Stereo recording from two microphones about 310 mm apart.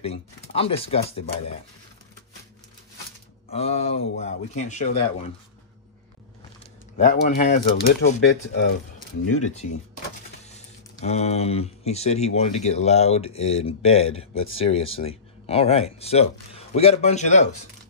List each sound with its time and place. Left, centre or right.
0.0 s speech: centre
3.5 s speech: centre
7.0 s speech: left
9.2 s speech: left
9.5 s speech: left